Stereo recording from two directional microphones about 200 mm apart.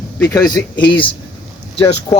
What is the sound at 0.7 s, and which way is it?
Speech, 25° left (ahead or behind).